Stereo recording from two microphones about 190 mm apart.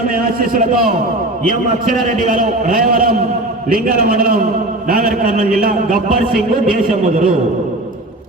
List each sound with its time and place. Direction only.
0.1 s a man's voice: 50° right (ahead or behind)
2.0 s a man's voice: 45° right (ahead or behind)